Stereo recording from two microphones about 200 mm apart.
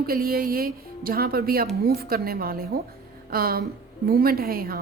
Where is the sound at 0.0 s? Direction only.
45° right (ahead or behind).